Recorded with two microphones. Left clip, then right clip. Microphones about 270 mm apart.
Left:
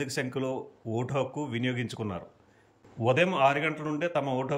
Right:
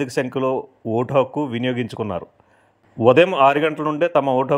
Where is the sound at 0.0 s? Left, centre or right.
Centre.